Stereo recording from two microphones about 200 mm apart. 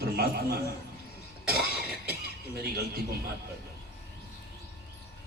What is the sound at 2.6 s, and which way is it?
Speech, 50° right (ahead or behind).